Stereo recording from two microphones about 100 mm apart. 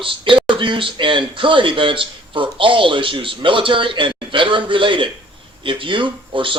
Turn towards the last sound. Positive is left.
turn(degrees=-55)  # may be behind; listen again after turning